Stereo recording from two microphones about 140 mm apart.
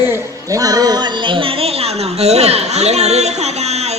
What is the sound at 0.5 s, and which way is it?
A woman's voice, 25° right (ahead or behind).